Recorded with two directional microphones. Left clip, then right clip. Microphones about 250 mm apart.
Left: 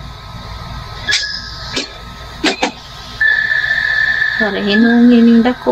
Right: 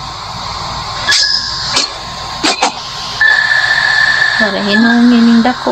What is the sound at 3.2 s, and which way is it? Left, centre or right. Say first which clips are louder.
Speech: right 3 dB; centre.